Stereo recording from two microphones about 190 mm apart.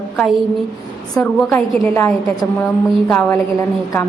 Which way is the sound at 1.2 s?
10° left (ahead or behind).